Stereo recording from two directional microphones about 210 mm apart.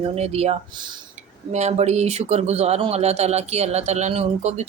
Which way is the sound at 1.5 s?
30° right (ahead or behind).